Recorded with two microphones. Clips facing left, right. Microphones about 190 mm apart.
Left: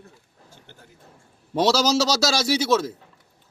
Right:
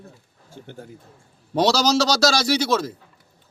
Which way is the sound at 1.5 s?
5° left (ahead or behind).